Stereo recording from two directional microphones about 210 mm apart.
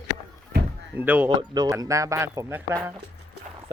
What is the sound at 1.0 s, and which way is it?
Speech, 10° right (ahead or behind).